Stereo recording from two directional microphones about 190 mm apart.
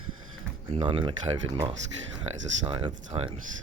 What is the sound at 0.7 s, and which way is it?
Speech, 25° right (ahead or behind).